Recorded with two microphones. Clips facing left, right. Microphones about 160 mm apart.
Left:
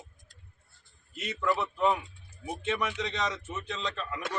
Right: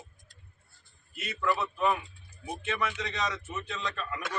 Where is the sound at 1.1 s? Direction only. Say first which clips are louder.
Left 1 dB; 20° left (ahead or behind).